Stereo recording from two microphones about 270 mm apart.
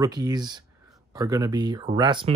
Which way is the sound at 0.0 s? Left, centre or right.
Centre.